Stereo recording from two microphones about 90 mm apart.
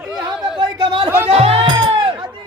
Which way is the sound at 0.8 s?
75° right (ahead or behind).